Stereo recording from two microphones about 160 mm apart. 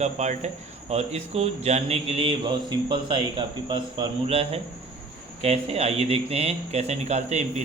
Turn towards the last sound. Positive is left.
turn(degrees=-45)  # may be behind; listen again after turning